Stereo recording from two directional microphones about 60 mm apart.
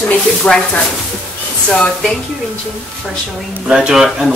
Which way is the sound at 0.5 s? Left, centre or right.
Left.